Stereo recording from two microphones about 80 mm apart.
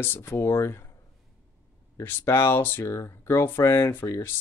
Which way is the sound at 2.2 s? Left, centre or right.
Left.